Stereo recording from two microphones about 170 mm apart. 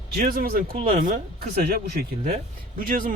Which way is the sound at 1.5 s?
65° right (ahead or behind).